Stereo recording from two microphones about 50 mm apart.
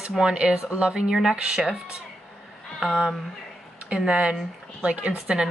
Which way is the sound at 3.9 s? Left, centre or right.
Right.